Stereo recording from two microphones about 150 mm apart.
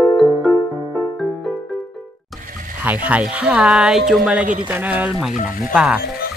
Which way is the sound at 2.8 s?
10° right (ahead or behind).